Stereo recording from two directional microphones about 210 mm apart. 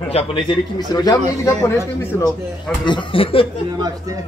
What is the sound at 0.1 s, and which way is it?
A man's voice, 25° left (ahead or behind).